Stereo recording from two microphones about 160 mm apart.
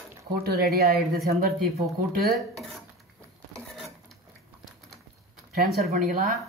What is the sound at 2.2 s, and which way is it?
Dishes, centre (ahead or behind).